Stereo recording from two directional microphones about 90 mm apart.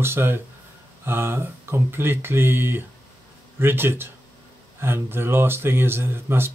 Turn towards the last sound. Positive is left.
turn(degrees=-25)  # may be behind; listen again after turning